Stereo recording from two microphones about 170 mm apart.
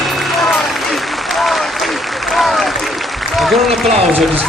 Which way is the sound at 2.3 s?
Centre (ahead or behind).